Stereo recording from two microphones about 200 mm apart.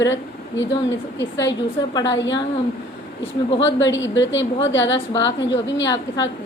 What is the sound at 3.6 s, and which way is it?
A woman's voice, 70° left (ahead or behind).